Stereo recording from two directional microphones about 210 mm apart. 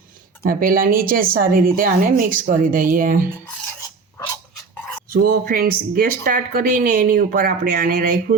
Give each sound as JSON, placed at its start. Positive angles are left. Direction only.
{"t": 0.4, "sound": "speech", "side_deg": -40}
{"t": 3.4, "sound": "filing", "side_deg": 10}
{"t": 5.1, "sound": "speech", "side_deg": -45}